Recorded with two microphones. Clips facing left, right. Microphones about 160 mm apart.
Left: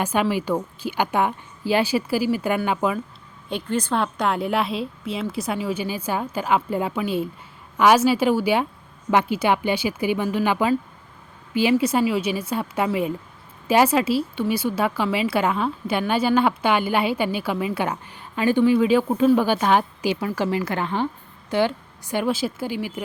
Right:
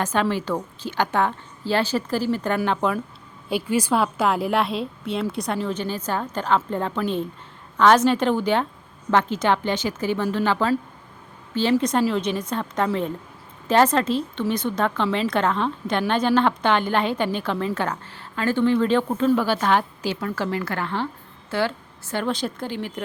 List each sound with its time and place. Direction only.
0.0 s a woman's voice: 10° left (ahead or behind)
3.5 s a woman's voice: 10° right (ahead or behind); by 23.0 s 10° left (ahead or behind)